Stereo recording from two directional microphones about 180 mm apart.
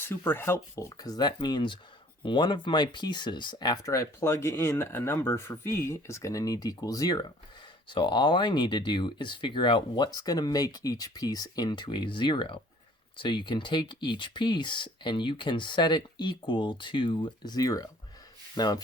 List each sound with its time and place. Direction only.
0.0 s speech: 10° left (ahead or behind)
18.5 s rub: 20° left (ahead or behind)